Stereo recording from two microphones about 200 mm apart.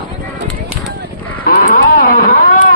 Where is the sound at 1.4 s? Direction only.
45° left (ahead or behind).